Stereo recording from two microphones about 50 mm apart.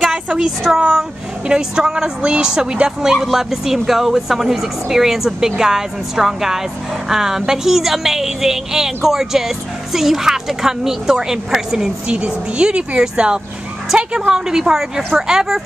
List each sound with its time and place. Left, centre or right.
0.0 s a woman's voice: centre
12.2 s speech: centre